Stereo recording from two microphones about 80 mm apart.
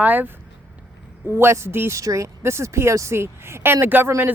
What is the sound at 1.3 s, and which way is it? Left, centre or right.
Speech, right.